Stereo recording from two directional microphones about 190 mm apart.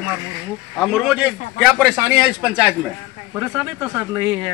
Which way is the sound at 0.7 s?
Centre (ahead or behind).